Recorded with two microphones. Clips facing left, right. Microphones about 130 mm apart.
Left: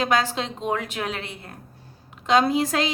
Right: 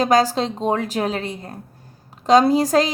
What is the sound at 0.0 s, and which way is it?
A woman's voice, 35° right (ahead or behind).